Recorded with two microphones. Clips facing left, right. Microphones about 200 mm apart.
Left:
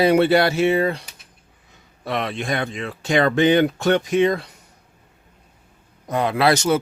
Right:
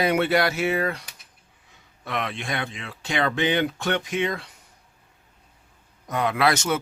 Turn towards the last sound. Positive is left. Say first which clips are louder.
# left 4 dB
turn(degrees=35)  # may be behind; listen again after turning